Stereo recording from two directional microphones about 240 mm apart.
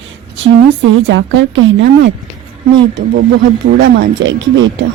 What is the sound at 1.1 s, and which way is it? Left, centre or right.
Speech, right.